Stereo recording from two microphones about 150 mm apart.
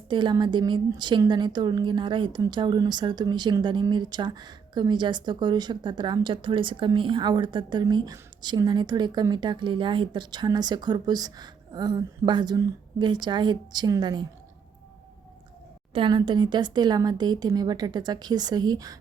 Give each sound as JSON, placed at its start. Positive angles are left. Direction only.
{"t": 0.1, "sound": "a woman's voice", "side_deg": -30}
{"t": 15.9, "sound": "a woman's voice", "side_deg": -35}